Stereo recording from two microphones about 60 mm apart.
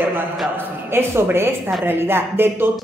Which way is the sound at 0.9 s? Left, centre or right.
Right.